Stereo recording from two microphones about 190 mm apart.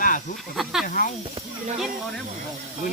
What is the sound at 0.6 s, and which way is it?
Speech, centre (ahead or behind).